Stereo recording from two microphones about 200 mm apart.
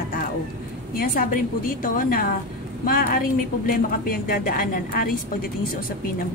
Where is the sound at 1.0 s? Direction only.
45° left (ahead or behind).